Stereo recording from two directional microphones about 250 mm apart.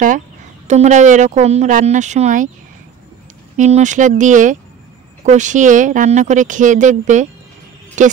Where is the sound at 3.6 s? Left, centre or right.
Right.